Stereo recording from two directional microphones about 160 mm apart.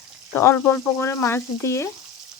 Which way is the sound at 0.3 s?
15° left (ahead or behind).